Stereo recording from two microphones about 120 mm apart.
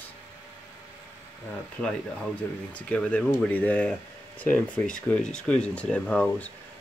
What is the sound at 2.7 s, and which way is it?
Speech, 10° left (ahead or behind).